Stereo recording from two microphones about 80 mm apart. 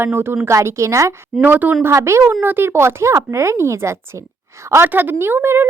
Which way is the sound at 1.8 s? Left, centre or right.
Right.